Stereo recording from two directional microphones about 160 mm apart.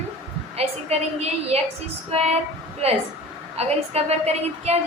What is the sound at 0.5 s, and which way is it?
A woman's voice, 40° right (ahead or behind).